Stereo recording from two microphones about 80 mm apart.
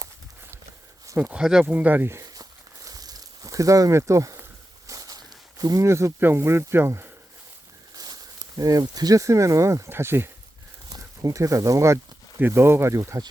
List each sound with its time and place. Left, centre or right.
1.2 s speech: centre
1.6 s speech: right
2.2 s a sound: right
5.5 s speech: right
5.9 s speech: right
7.9 s a sound: right
8.8 s speech: right
10.9 s speech: right